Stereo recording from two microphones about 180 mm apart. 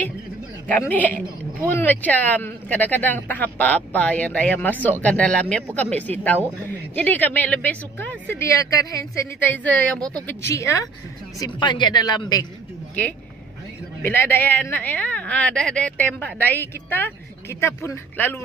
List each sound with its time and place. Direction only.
0.7 s speech: 10° left (ahead or behind)
14.0 s speech: 15° left (ahead or behind)